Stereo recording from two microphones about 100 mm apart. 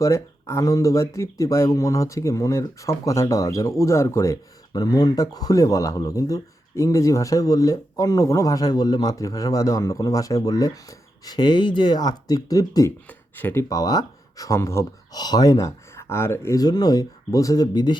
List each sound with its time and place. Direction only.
0.0 s speech: 30° left (ahead or behind)
13.1 s speech: 20° left (ahead or behind)
13.7 s speech: 40° left (ahead or behind)
15.1 s speech: 40° left (ahead or behind)